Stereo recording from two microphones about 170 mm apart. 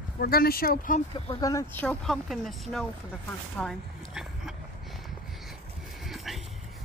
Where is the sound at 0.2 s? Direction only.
65° left (ahead or behind).